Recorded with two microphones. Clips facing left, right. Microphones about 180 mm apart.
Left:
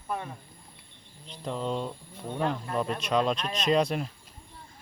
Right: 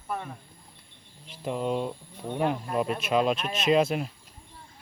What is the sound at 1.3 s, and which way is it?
Speech, 10° right (ahead or behind).